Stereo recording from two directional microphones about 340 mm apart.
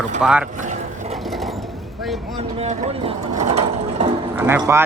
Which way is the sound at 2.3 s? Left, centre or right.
Centre.